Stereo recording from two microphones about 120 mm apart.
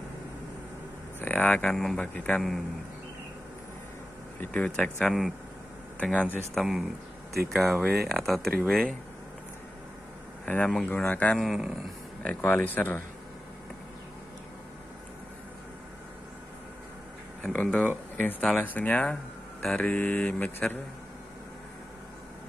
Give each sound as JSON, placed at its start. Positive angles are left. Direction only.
{"t": 1.2, "sound": "speech", "side_deg": 15}
{"t": 4.4, "sound": "speech", "side_deg": 10}
{"t": 6.5, "sound": "speech", "side_deg": -5}
{"t": 10.4, "sound": "speech", "side_deg": 10}
{"t": 11.3, "sound": "speech", "side_deg": 0}
{"t": 12.4, "sound": "speech", "side_deg": 15}
{"t": 17.4, "sound": "speech", "side_deg": 10}